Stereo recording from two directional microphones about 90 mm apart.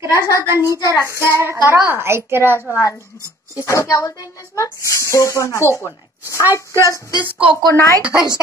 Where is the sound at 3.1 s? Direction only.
40° left (ahead or behind).